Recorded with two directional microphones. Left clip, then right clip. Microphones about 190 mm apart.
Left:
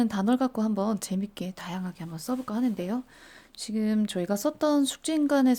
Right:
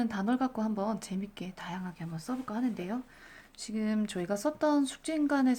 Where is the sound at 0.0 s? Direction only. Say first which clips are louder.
Left 5 dB; 50° left (ahead or behind).